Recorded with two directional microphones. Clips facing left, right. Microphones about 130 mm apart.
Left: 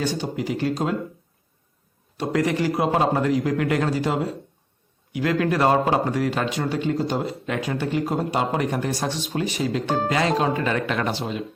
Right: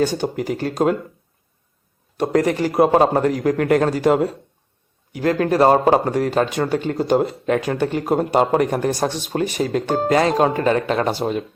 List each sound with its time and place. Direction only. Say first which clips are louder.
0.0 s speech: right 5 dB; 50° right (ahead or behind)
2.1 s speech: right 4 dB; 45° right (ahead or behind)
5.1 s speech: right 4 dB; 40° right (ahead or behind)
11.2 s speech: right 6 dB; 45° right (ahead or behind)